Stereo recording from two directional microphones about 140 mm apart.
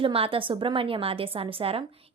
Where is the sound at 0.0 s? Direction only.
40° right (ahead or behind).